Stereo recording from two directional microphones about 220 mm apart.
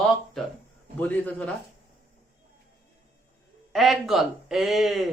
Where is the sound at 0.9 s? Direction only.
5° left (ahead or behind).